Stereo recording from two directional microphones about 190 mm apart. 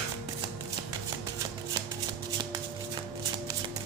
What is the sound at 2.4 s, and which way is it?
Shuffling cards, 25° right (ahead or behind).